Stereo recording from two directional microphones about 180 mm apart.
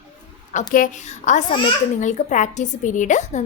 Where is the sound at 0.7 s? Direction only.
45° left (ahead or behind).